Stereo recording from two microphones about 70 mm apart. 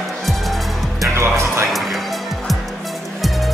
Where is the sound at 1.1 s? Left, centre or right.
Right.